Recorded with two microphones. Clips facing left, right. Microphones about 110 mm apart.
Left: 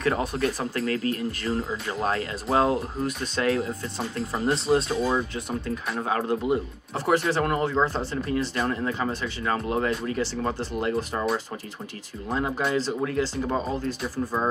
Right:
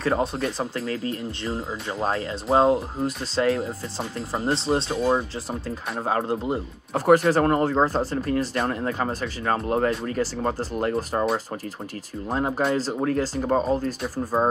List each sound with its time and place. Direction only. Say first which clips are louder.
0.0 s speech: right 1 dB; 30° right (ahead or behind)
5.9 s speech: right 2 dB; 35° right (ahead or behind)
6.9 s speech: right 6 dB; 45° right (ahead or behind)
12.3 s speech: right 2 dB; 45° right (ahead or behind)